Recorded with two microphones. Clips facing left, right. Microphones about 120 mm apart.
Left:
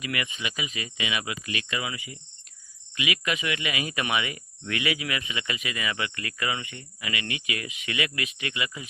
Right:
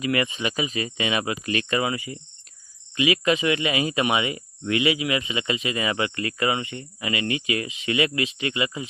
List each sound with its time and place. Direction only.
0.0 s speech: 35° right (ahead or behind)